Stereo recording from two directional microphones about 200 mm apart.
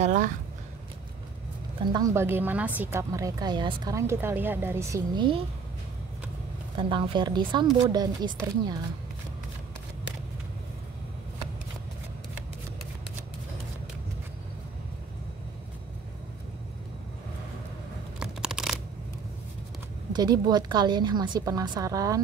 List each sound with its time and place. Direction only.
0.0 s speech: 40° right (ahead or behind)
1.9 s a woman's voice: 20° right (ahead or behind)
6.8 s a woman's voice: 25° right (ahead or behind)
18.2 s a sound: 5° right (ahead or behind)
20.1 s a woman's voice: 20° right (ahead or behind)